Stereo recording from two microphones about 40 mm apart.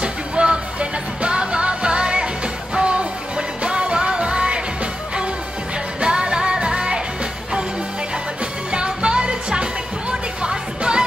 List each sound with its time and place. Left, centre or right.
0.0 s music: right
5.9 s music: right
8.7 s music: right